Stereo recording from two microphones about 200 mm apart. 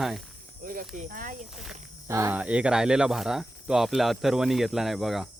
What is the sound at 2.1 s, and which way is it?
Speech, 15° right (ahead or behind).